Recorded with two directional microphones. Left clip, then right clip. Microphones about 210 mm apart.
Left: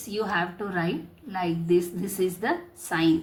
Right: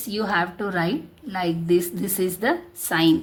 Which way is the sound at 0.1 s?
35° right (ahead or behind).